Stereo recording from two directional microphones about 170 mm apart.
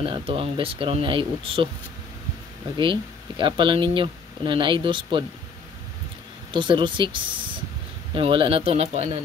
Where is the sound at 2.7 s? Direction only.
30° right (ahead or behind).